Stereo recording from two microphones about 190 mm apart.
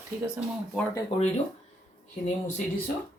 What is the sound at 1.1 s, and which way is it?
Speech, 30° left (ahead or behind).